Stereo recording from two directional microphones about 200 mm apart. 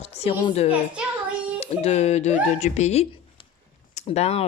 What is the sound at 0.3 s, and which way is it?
A woman's voice, 30° left (ahead or behind).